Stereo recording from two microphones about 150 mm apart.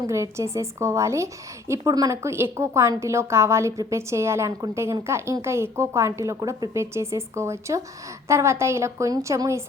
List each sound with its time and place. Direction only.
0.1 s a woman's voice: 20° right (ahead or behind)